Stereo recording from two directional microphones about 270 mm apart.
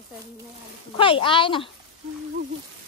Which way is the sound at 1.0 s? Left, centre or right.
Centre.